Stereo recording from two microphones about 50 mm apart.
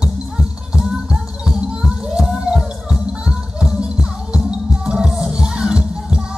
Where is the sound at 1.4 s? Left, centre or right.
Centre.